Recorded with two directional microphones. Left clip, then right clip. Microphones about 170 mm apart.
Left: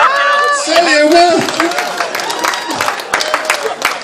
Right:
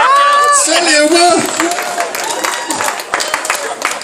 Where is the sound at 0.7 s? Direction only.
35° right (ahead or behind).